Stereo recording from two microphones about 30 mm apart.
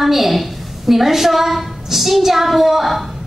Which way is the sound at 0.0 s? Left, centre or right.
Centre.